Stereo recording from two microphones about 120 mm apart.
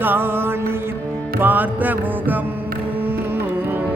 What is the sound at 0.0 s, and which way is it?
Mantra, 15° right (ahead or behind).